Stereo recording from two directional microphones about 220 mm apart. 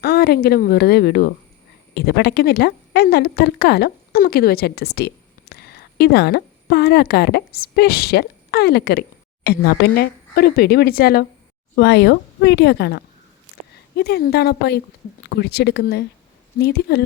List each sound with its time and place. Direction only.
0.0 s a woman's voice: 45° left (ahead or behind)